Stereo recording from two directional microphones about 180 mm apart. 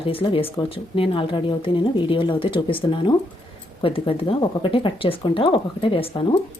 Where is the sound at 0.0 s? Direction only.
30° left (ahead or behind).